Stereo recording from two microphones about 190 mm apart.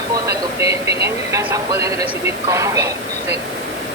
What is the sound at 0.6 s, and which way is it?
A woman's voice, 15° right (ahead or behind).